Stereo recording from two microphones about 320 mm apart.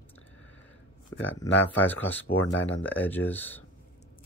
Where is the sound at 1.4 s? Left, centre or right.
Left.